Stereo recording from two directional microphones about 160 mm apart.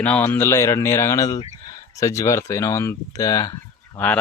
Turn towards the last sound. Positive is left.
turn(degrees=20)  # may be behind; listen again after turning